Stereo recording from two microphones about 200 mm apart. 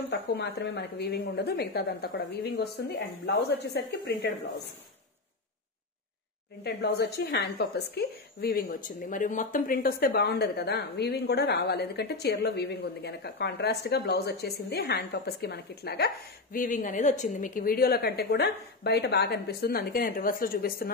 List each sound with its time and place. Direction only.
0.3 s a woman's voice: 55° left (ahead or behind)
6.6 s a woman's voice: 55° left (ahead or behind)
16.5 s a woman's voice: 40° left (ahead or behind)